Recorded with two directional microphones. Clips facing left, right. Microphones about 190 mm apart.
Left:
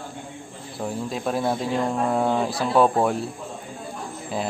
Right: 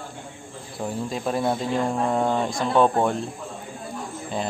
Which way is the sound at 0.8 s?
Centre (ahead or behind).